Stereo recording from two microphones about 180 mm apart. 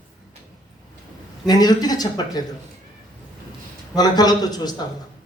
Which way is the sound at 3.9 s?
20° left (ahead or behind).